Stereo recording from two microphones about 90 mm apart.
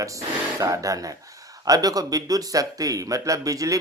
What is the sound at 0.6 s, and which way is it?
Speech, 40° right (ahead or behind).